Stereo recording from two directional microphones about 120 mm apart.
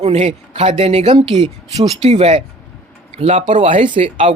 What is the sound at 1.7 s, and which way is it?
Speech, 60° right (ahead or behind).